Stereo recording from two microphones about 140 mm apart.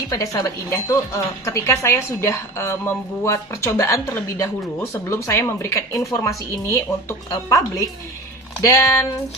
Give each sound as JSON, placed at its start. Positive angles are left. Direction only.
{"t": 0.1, "sound": "a woman's voice", "side_deg": 25}